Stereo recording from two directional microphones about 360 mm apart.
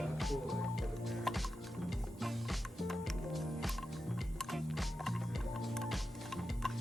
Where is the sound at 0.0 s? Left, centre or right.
Centre.